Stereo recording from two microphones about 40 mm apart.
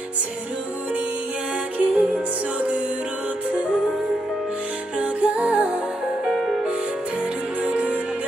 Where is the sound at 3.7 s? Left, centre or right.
Centre.